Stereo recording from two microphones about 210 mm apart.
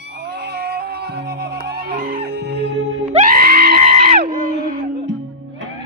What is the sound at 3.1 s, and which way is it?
Screaming, 45° right (ahead or behind).